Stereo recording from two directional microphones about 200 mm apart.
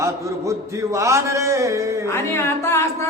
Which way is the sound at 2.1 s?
15° left (ahead or behind).